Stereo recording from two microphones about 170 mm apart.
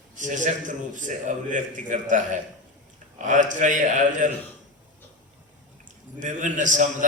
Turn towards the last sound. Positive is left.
turn(degrees=-50)  # may be behind; listen again after turning